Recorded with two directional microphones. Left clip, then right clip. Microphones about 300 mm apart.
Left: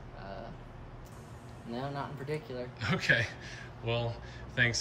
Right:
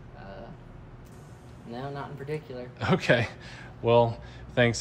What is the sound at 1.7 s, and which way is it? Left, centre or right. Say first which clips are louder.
Speech: right 1 dB; centre.